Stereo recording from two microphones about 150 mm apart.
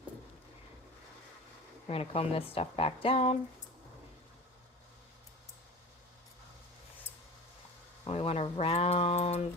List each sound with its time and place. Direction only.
1.9 s speech: 40° left (ahead or behind)
8.0 s speech: 45° left (ahead or behind)